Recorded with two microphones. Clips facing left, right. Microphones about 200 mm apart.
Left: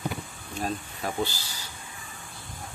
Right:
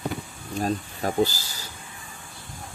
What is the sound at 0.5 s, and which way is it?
Speech, 40° right (ahead or behind).